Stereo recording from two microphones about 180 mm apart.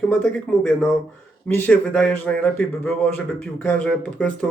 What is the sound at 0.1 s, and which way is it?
Speech, 5° left (ahead or behind).